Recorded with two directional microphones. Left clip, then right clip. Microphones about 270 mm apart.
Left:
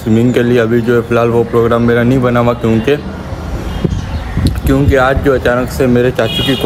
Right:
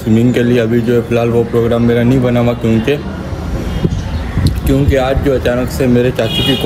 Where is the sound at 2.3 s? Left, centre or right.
Centre.